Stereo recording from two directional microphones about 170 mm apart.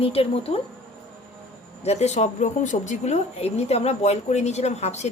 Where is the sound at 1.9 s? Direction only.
40° left (ahead or behind).